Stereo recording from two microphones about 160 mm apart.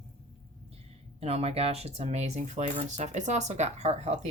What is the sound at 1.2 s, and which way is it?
Speech, 40° right (ahead or behind).